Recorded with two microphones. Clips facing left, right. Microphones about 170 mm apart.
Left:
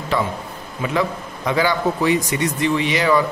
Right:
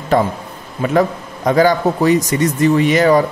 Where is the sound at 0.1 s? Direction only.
50° right (ahead or behind).